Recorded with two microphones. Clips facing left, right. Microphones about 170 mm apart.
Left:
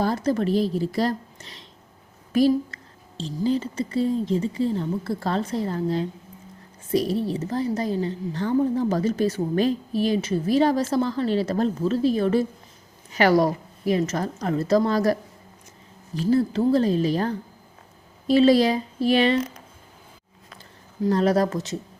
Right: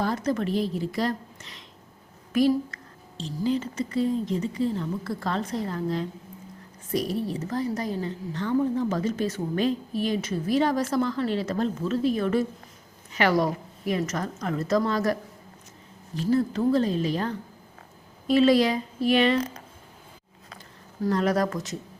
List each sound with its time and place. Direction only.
0.0 s a woman's voice: 35° left (ahead or behind)
21.1 s speech: 30° left (ahead or behind)